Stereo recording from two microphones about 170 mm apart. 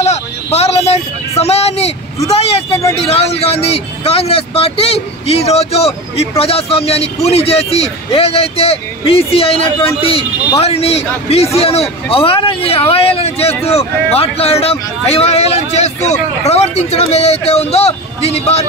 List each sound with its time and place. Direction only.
0.0 s vehicle: 40° left (ahead or behind)
2.2 s speech: 35° left (ahead or behind)